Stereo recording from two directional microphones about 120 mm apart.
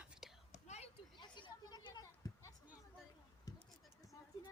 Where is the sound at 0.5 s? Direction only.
70° left (ahead or behind).